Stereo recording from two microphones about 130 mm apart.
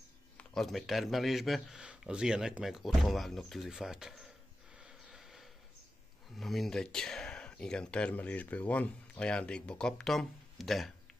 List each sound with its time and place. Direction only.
0.4 s speech: centre (ahead or behind)
4.7 s snort: 5° right (ahead or behind)
6.3 s speech: centre (ahead or behind)